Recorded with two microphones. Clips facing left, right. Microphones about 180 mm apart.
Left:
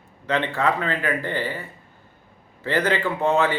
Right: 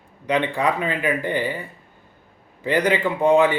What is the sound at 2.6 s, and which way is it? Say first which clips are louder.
Speech: right 3 dB; 15° right (ahead or behind).